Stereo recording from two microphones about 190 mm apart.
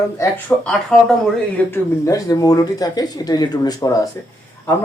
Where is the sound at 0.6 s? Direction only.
Centre (ahead or behind).